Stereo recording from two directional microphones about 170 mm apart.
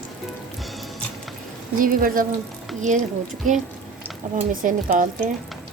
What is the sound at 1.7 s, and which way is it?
A woman's voice, 55° right (ahead or behind).